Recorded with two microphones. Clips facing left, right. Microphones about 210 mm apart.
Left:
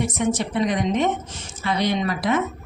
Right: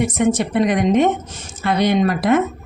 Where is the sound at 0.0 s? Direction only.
55° right (ahead or behind).